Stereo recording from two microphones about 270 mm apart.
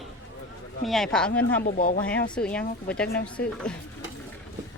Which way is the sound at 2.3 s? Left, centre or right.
Centre.